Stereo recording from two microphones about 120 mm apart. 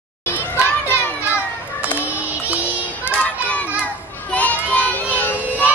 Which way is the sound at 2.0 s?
15° right (ahead or behind).